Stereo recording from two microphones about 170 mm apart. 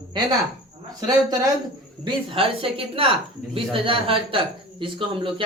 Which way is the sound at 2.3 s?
30° right (ahead or behind).